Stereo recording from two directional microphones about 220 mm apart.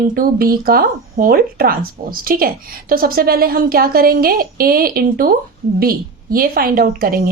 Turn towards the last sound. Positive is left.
turn(degrees=-40)  # may be behind; listen again after turning